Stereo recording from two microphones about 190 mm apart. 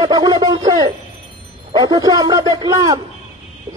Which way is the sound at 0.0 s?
20° right (ahead or behind).